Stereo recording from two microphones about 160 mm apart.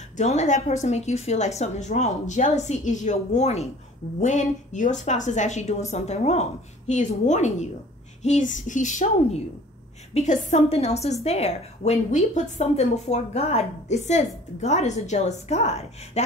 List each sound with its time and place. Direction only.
0.2 s a woman's voice: 45° left (ahead or behind)